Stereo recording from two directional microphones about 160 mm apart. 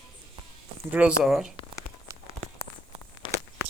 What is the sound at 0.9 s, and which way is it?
Speech, 10° right (ahead or behind).